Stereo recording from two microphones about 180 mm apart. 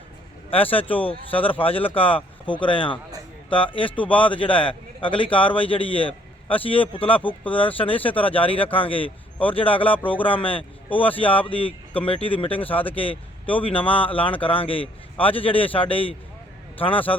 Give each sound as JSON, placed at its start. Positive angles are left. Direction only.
{"t": 0.5, "sound": "a man's voice", "side_deg": 30}
{"t": 12.6, "sound": "speech", "side_deg": 10}
{"t": 12.9, "sound": "a man's voice", "side_deg": 30}